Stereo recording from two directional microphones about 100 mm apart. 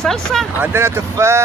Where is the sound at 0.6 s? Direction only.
25° right (ahead or behind).